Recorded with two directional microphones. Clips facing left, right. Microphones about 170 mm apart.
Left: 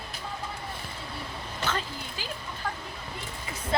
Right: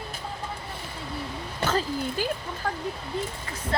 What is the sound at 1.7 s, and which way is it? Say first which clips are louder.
Speech: right 7 dB; 45° right (ahead or behind).